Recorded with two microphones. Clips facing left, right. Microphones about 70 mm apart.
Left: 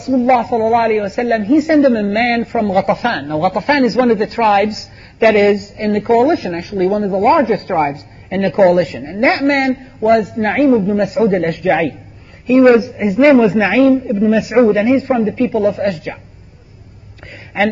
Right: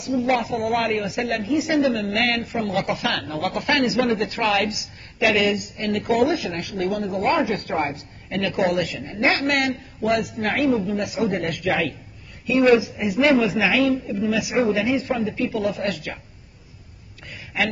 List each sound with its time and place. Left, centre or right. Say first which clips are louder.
0.0 s a woman's voice: left 9 dB; left
17.5 s a woman's voice: left 9 dB; left